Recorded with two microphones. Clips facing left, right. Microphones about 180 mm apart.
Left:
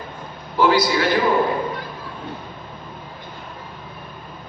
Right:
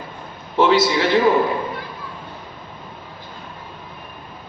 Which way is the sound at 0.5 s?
25° right (ahead or behind).